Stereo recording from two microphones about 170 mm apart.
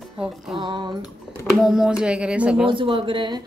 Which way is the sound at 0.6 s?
25° right (ahead or behind).